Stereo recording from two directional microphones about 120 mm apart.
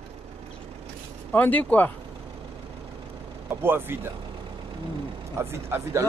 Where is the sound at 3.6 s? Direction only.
20° right (ahead or behind).